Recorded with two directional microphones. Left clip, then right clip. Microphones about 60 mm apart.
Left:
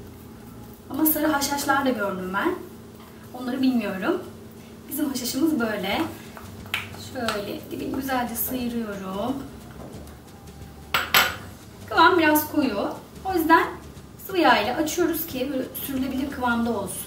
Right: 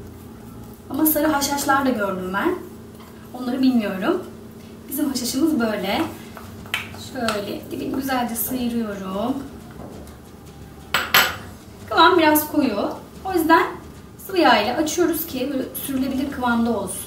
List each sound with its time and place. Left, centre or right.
0.8 s a woman's voice: centre
10.9 s dishes: centre
11.9 s a woman's voice: centre